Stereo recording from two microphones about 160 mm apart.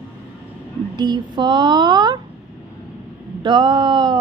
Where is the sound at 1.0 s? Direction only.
30° right (ahead or behind).